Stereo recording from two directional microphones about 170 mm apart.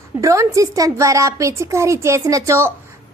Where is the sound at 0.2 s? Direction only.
20° right (ahead or behind).